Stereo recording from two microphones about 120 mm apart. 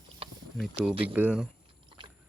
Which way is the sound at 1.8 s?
40° right (ahead or behind).